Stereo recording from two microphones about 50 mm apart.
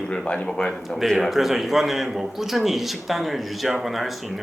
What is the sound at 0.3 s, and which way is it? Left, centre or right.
Speech, centre.